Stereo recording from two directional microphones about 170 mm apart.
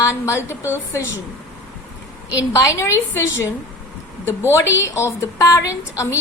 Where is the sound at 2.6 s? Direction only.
15° left (ahead or behind).